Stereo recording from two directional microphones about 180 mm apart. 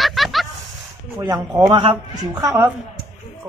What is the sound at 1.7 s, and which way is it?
Speech, 30° right (ahead or behind).